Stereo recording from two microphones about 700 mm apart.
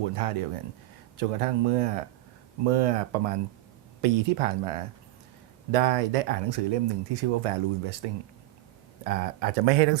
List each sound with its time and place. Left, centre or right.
0.0 s speech: right
9.0 s speech: right